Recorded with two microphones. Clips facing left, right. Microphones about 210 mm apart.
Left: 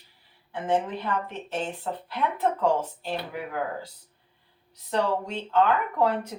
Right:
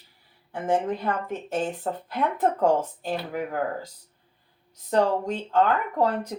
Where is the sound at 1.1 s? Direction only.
45° right (ahead or behind).